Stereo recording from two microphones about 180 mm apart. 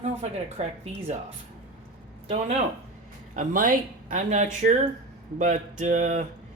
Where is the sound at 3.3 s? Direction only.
45° right (ahead or behind).